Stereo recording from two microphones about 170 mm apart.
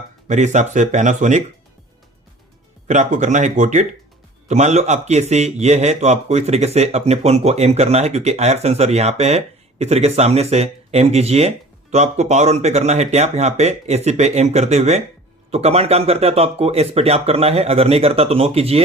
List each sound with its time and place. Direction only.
0.3 s speech: 45° right (ahead or behind)
2.8 s a man's voice: 45° right (ahead or behind)